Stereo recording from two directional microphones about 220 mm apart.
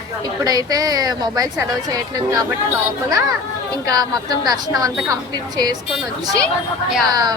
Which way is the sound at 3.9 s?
15° right (ahead or behind).